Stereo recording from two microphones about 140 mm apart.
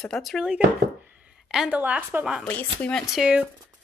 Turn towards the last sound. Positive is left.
turn(degrees=-5)  # may be behind; listen again after turning